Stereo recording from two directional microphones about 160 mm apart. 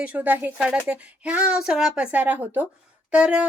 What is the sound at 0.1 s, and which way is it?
Speech, 10° right (ahead or behind).